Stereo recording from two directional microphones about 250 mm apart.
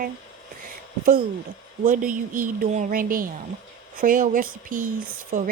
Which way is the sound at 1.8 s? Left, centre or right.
Right.